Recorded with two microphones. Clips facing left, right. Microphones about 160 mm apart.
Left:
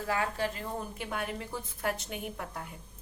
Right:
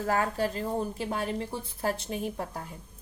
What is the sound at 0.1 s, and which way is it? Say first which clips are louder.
A woman's voice: right 4 dB; 40° right (ahead or behind).